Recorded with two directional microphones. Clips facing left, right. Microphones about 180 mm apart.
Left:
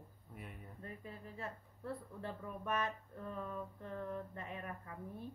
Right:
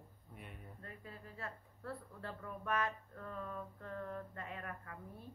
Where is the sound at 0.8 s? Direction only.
20° left (ahead or behind).